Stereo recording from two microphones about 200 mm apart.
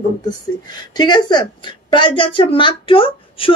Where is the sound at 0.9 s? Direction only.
20° left (ahead or behind).